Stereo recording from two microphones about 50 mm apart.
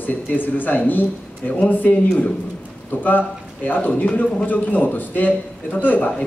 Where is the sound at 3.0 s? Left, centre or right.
Left.